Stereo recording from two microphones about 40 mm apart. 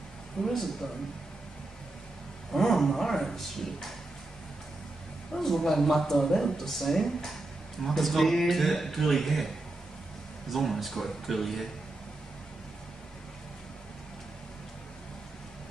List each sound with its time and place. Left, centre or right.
0.4 s speech: centre
2.5 s speech: centre
5.3 s speech: centre
10.5 s speech: centre